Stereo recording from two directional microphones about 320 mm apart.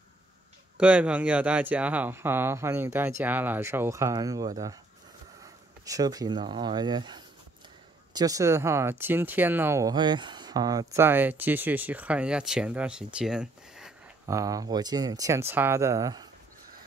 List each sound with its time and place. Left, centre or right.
0.7 s speech: centre
5.9 s speech: centre